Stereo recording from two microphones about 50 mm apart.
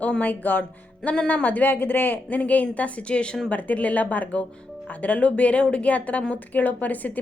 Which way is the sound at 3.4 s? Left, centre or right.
Left.